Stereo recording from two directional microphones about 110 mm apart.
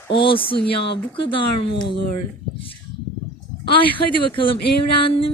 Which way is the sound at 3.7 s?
50° left (ahead or behind).